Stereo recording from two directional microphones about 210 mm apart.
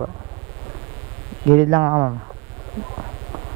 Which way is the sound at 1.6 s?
20° right (ahead or behind).